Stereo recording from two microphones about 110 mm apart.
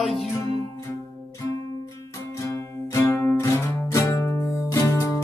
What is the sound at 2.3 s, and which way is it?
Music, 25° left (ahead or behind).